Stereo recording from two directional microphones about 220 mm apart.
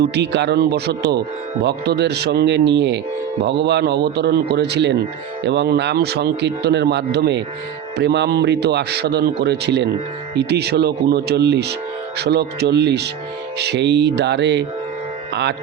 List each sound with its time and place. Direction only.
0.0 s speech: 50° right (ahead or behind)